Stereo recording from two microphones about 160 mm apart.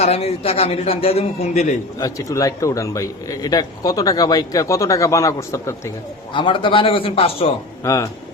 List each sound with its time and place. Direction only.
0.0 s a man's voice: 40° left (ahead or behind)
2.0 s a man's voice: 20° left (ahead or behind)
6.3 s a man's voice: 30° left (ahead or behind)
7.9 s a man's voice: 20° left (ahead or behind)